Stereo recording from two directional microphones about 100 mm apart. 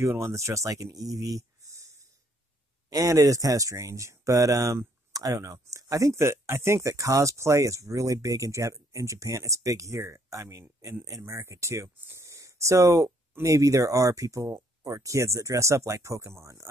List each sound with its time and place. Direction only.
0.0 s speech: 30° right (ahead or behind)